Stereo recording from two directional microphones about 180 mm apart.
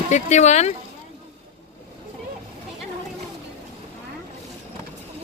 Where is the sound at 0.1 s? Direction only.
40° left (ahead or behind).